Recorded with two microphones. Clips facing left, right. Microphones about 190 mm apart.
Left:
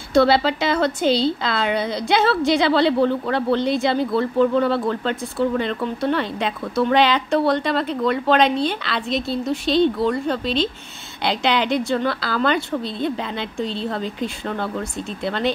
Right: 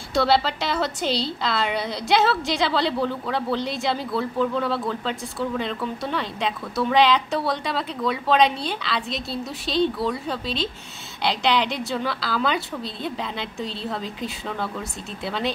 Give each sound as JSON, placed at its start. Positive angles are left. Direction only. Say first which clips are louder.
{"t": 0.1, "sound": "a woman's voice", "louder": "left 5 dB", "side_deg": 0}